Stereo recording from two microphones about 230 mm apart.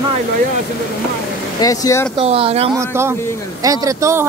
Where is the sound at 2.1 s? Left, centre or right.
Right.